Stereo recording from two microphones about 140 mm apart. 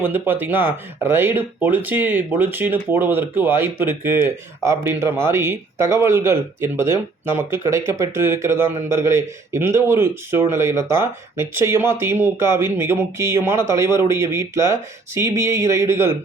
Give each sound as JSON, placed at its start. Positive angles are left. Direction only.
{"t": 0.0, "sound": "speech", "side_deg": -15}